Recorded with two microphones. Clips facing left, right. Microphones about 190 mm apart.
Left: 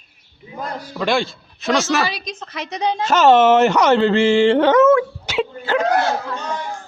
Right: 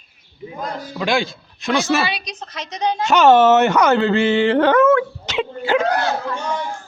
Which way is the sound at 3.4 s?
30° left (ahead or behind).